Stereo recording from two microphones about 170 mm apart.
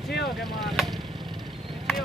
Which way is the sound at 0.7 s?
Centre (ahead or behind).